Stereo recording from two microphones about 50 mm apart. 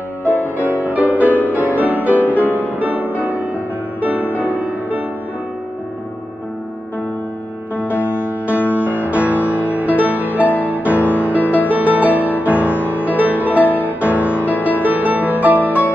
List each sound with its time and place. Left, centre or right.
0.2 s music: left
0.6 s music: right
8.0 s music: right
11.0 s music: left
11.7 s music: right
13.7 s music: left
14.8 s music: right